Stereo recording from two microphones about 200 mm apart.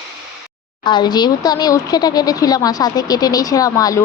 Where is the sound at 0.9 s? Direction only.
20° left (ahead or behind).